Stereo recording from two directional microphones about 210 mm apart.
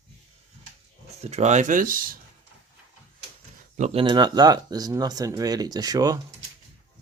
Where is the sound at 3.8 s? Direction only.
25° right (ahead or behind).